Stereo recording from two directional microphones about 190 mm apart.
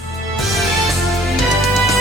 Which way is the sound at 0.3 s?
Centre (ahead or behind).